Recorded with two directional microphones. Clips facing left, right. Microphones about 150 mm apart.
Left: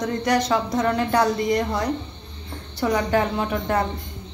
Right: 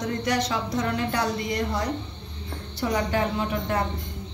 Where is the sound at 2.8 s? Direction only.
50° left (ahead or behind).